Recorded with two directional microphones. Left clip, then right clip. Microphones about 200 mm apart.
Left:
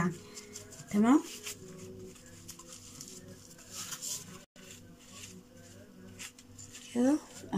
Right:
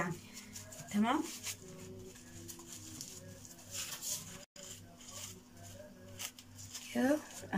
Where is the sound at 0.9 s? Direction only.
30° left (ahead or behind).